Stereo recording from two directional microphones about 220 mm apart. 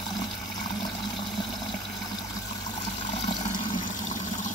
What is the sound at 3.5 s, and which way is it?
Toilet flush, 35° left (ahead or behind).